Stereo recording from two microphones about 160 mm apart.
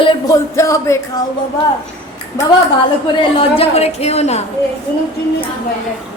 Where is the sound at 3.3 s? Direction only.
40° left (ahead or behind).